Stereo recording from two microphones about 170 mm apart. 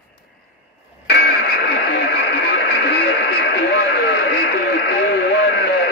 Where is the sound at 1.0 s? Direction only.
75° left (ahead or behind).